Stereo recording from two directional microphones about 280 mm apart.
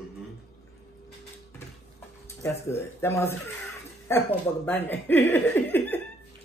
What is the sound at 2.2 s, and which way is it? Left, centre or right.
Speech, centre.